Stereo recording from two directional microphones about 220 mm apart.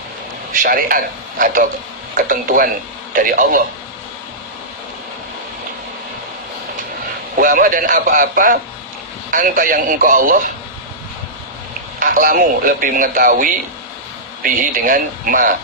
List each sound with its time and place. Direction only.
0.5 s speech: 40° right (ahead or behind)
7.3 s speech: 40° right (ahead or behind)
11.9 s speech: 40° right (ahead or behind)